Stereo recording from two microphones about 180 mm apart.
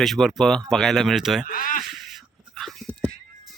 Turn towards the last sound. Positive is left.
turn(degrees=5)  # may be behind; listen again after turning